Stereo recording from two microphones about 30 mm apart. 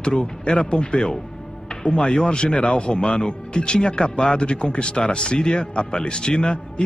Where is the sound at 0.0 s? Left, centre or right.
Left.